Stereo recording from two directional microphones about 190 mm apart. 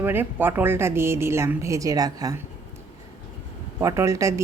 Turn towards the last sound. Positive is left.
turn(degrees=-15)  # may be behind; listen again after turning